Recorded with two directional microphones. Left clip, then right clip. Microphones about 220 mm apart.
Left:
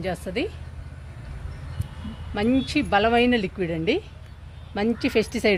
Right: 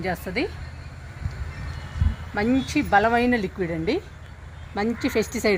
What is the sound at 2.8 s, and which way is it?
A man's voice, 55° left (ahead or behind).